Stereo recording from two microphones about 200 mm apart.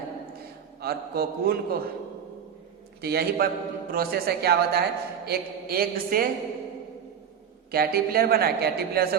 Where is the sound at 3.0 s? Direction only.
50° right (ahead or behind).